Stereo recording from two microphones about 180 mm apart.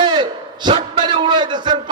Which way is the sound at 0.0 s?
25° right (ahead or behind).